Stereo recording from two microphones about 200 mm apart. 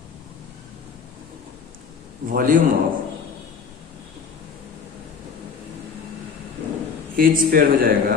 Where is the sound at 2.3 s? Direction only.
45° right (ahead or behind).